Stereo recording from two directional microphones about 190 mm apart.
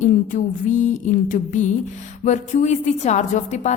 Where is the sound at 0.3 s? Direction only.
40° left (ahead or behind).